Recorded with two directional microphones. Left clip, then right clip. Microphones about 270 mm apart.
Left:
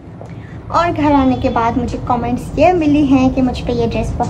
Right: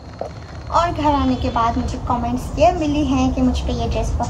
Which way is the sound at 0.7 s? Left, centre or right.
Centre.